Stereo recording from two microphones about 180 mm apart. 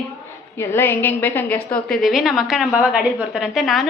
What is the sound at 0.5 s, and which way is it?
A woman's voice, 15° left (ahead or behind).